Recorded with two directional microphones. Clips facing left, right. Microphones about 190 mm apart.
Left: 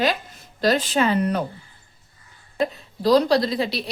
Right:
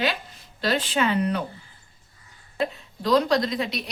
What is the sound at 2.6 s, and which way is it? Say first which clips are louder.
A woman's voice: left 5 dB; 35° left (ahead or behind).